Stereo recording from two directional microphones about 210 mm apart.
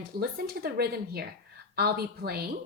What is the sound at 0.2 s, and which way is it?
A woman's voice, 45° right (ahead or behind).